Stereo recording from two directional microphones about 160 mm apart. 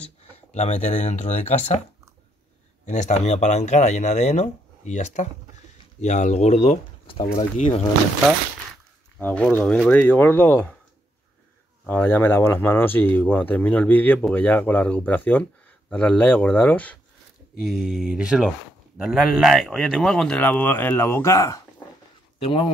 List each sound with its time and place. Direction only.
0.5 s speech: 45° left (ahead or behind)
2.8 s speech: 50° left (ahead or behind)
9.2 s speech: 10° left (ahead or behind)
11.8 s speech: 10° left (ahead or behind)
22.4 s speech: 35° left (ahead or behind)